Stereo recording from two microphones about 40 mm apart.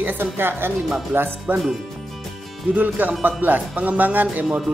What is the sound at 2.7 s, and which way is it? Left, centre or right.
Speech, right.